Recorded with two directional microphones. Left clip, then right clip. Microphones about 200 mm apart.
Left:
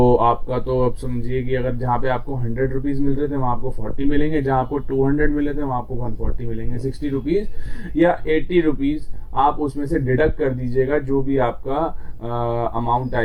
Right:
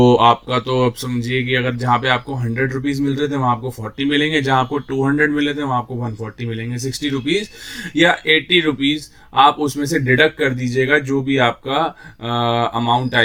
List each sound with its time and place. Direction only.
0.0 s speech: 25° right (ahead or behind)
4.6 s speech: 40° right (ahead or behind)